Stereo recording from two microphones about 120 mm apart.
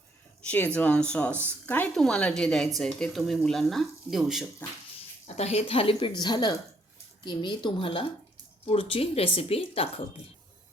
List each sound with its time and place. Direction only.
0.5 s speech: 15° left (ahead or behind); by 4.4 s centre (ahead or behind)
5.2 s a woman's voice: 65° left (ahead or behind)